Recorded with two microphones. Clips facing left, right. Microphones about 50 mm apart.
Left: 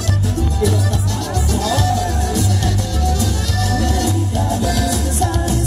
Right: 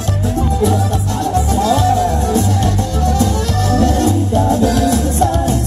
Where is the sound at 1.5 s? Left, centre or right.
Right.